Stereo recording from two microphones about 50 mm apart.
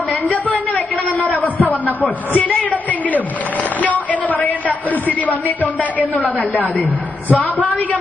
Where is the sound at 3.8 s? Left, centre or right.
Left.